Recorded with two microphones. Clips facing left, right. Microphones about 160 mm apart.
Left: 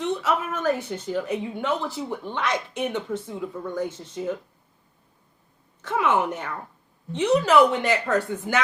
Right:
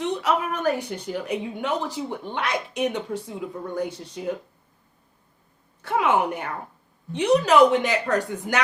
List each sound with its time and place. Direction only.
0.0 s a woman's voice: 15° right (ahead or behind)
5.8 s a woman's voice: 10° right (ahead or behind)